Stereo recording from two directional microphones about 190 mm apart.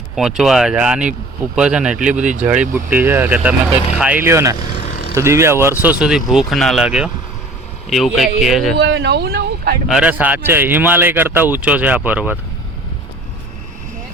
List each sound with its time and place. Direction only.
0.2 s speech: 5° right (ahead or behind)
4.7 s vehicle: 35° left (ahead or behind)
5.1 s speech: 15° right (ahead or behind)
8.8 s speech: 65° right (ahead or behind)
9.9 s speech: 5° right (ahead or behind)